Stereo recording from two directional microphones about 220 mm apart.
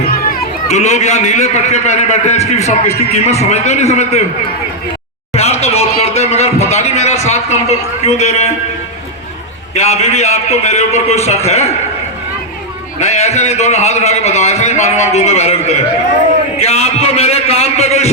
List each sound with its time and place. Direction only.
0.1 s a man's voice: 35° left (ahead or behind)
5.3 s speech: 30° left (ahead or behind)
9.7 s a man's voice: 30° left (ahead or behind)
13.0 s a man's voice: 30° left (ahead or behind)